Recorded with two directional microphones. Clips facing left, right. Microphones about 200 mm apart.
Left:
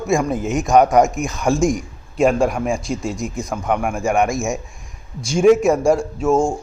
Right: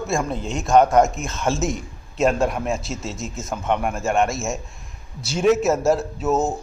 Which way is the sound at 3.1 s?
15° left (ahead or behind).